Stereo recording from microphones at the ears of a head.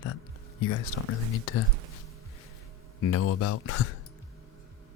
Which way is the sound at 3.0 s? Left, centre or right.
Left.